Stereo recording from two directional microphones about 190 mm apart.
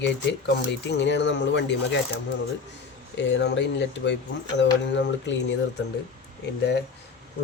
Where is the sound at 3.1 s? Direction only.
65° left (ahead or behind).